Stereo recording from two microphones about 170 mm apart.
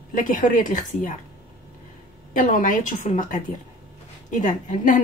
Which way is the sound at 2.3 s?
50° left (ahead or behind).